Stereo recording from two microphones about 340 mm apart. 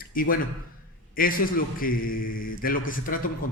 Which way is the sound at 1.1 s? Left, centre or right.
Left.